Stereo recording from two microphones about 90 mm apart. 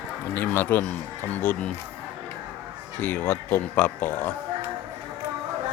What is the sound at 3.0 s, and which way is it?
Speech, 25° left (ahead or behind).